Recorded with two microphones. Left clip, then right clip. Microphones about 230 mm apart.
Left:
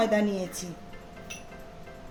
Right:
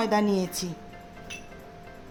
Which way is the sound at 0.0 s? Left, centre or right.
Right.